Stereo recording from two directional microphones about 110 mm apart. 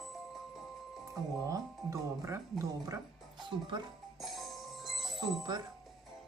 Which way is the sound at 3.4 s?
45° right (ahead or behind).